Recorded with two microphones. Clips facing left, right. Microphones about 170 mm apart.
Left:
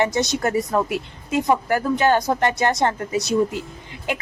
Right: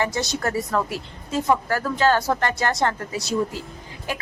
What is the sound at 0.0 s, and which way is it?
A woman's voice, 20° left (ahead or behind).